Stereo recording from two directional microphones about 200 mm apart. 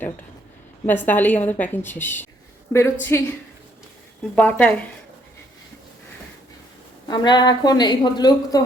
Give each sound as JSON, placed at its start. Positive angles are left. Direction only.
{"t": 0.9, "sound": "a woman's voice", "side_deg": 10}
{"t": 7.1, "sound": "a woman's voice", "side_deg": 20}